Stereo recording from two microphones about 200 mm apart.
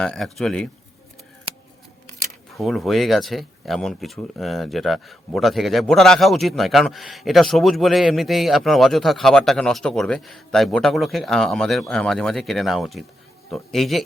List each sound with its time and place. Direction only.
0.0 s speech: 5° left (ahead or behind)
2.6 s speech: centre (ahead or behind)